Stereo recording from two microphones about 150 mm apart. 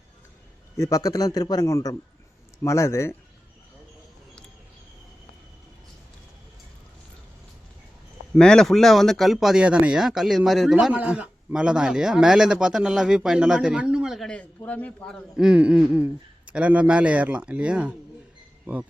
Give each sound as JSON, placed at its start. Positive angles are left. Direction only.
{"t": 0.8, "sound": "a man's voice", "side_deg": 20}
{"t": 8.4, "sound": "speech", "side_deg": 5}